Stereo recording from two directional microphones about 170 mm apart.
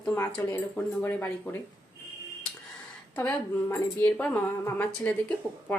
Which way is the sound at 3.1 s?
10° left (ahead or behind).